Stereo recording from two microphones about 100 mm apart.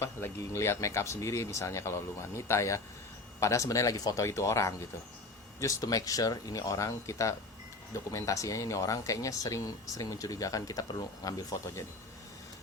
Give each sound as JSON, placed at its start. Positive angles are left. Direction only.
{"t": 0.0, "sound": "speech", "side_deg": 30}